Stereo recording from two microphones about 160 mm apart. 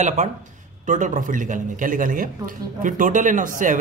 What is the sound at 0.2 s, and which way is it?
Speech, 50° right (ahead or behind).